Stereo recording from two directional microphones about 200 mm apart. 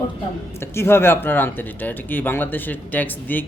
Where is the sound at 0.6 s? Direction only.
10° left (ahead or behind).